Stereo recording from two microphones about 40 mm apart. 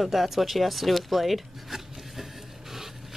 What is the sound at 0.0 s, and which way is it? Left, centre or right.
Speech, centre.